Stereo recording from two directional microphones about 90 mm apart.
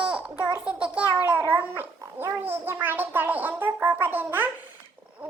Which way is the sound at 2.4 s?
25° right (ahead or behind).